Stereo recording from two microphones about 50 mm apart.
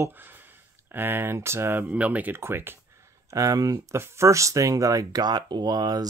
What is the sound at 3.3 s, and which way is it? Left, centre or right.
Speech, right.